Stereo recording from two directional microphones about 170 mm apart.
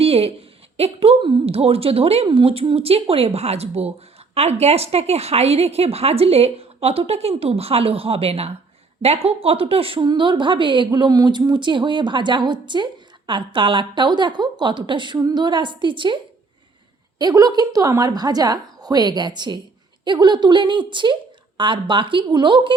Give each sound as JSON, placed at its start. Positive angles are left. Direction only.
{"t": 0.0, "sound": "a sound", "side_deg": -35}
{"t": 0.8, "sound": "a woman's voice", "side_deg": -35}
{"t": 17.2, "sound": "speech", "side_deg": -20}